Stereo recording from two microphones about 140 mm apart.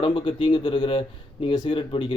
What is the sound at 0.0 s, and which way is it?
Speech, 35° left (ahead or behind).